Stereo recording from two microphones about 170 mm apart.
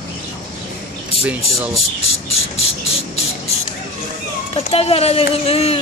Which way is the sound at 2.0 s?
35° left (ahead or behind).